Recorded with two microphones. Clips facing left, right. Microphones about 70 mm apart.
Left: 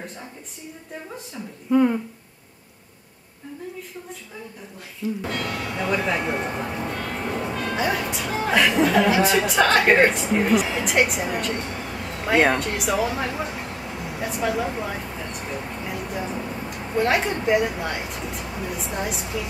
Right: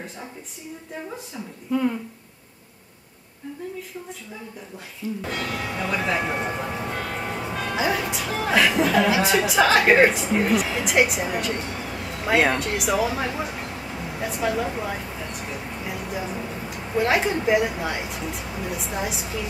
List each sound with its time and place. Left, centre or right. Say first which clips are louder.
1.7 s speech: left 5 dB; centre
5.3 s speech: even; centre